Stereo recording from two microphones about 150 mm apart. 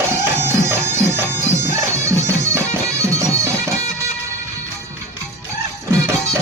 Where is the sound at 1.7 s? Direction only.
20° right (ahead or behind).